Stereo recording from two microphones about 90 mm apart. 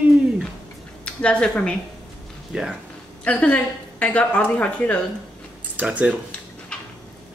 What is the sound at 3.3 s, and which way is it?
A woman's voice, 15° left (ahead or behind).